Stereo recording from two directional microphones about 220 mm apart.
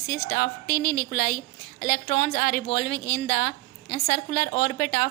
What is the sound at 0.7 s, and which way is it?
Speech, 20° left (ahead or behind).